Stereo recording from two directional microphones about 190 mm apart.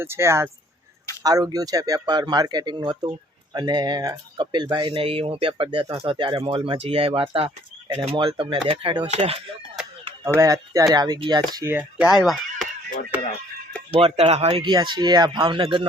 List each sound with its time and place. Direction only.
0.0 s speech: 15° right (ahead or behind); by 9.4 s 30° right (ahead or behind)
10.2 s speech: 15° right (ahead or behind)
14.0 s speech: 35° right (ahead or behind)